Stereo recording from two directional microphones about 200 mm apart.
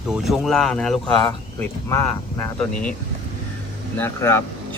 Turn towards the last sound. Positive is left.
turn(degrees=10)  # may be behind; listen again after turning